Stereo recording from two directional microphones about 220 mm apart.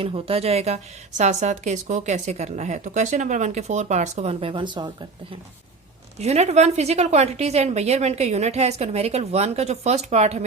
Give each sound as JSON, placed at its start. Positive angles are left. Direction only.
{"t": 0.0, "sound": "a woman's voice", "side_deg": -25}